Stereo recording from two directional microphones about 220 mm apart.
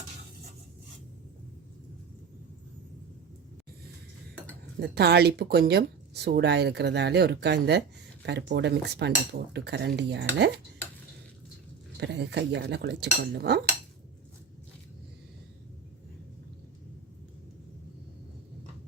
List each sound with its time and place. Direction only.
4.8 s speech: 50° right (ahead or behind)
11.9 s speech: 50° right (ahead or behind)